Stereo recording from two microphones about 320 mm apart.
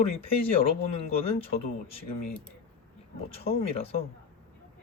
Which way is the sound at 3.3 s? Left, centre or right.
Centre.